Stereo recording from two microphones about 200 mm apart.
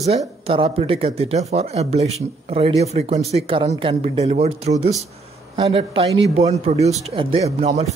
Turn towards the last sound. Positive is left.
turn(degrees=-35)  # may be behind; listen again after turning